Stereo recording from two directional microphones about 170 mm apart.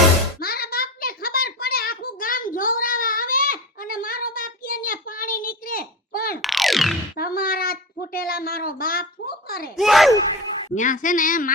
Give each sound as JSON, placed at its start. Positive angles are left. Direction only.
{"t": 0.3, "sound": "a sound", "side_deg": 60}
{"t": 6.4, "sound": "music", "side_deg": 0}
{"t": 7.2, "sound": "a child's voice", "side_deg": 60}
{"t": 9.7, "sound": "speech", "side_deg": 0}
{"t": 10.8, "sound": "a woman's voice", "side_deg": 50}